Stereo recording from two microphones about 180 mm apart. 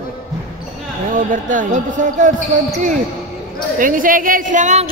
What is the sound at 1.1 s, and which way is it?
Speech, 50° right (ahead or behind).